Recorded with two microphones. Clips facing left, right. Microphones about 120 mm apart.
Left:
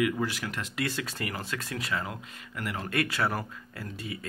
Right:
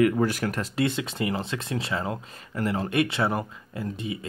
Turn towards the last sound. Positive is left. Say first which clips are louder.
# right 7 dB
turn(degrees=-20)  # may be behind; listen again after turning